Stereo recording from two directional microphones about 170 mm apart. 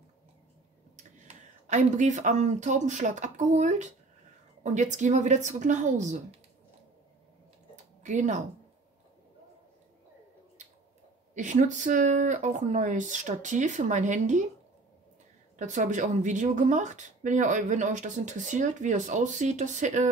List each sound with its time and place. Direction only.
0.9 s a woman's voice: 45° right (ahead or behind)
7.7 s a sound: 45° right (ahead or behind)
11.3 s a woman's voice: 45° right (ahead or behind)
15.6 s a woman's voice: 45° right (ahead or behind)